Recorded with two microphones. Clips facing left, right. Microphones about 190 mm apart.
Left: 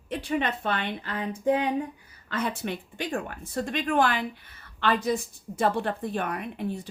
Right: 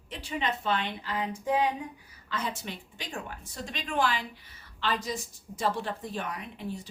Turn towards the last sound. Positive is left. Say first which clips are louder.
# left 6 dB
turn(degrees=55)  # may be behind; listen again after turning